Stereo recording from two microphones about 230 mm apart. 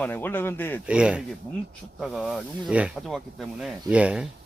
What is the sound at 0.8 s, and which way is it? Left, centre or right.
Speech, centre.